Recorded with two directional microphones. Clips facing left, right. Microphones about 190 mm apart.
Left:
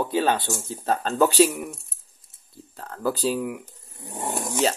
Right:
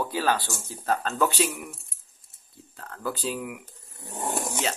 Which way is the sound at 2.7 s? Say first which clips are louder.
Left 6 dB; 35° left (ahead or behind).